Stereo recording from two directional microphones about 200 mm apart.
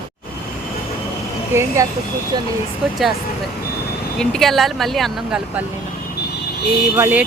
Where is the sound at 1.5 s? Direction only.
15° right (ahead or behind).